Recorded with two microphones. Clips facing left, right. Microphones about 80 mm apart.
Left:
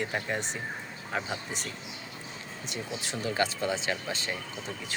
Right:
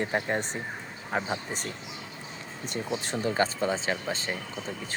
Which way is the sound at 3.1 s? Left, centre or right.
Right.